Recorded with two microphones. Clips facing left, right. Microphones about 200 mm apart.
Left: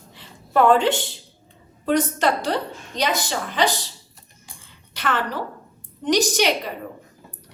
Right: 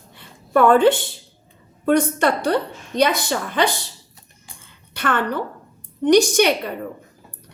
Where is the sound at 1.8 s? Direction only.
55° right (ahead or behind).